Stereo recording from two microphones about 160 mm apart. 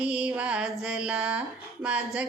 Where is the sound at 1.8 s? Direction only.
5° right (ahead or behind).